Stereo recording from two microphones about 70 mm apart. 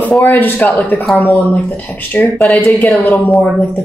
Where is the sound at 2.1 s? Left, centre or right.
Left.